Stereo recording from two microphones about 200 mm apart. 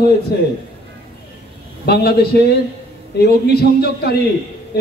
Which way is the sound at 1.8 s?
50° left (ahead or behind).